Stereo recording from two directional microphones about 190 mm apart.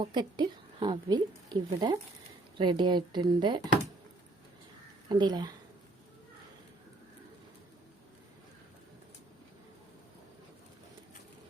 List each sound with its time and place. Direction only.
0.0 s speech: 25° right (ahead or behind)
5.0 s speech: 20° right (ahead or behind)